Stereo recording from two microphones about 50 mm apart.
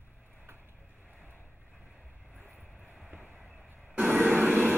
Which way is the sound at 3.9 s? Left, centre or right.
Right.